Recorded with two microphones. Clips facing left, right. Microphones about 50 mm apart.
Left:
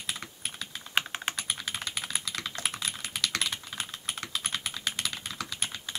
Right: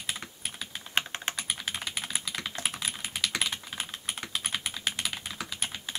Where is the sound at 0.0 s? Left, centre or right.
Centre.